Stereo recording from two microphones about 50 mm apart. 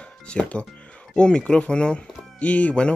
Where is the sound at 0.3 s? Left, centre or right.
Left.